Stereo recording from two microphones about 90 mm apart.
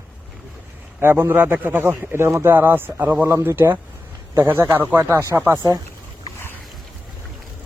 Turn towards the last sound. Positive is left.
turn(degrees=-35)  # may be behind; listen again after turning